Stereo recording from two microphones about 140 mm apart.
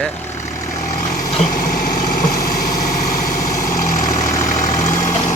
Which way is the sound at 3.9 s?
65° left (ahead or behind).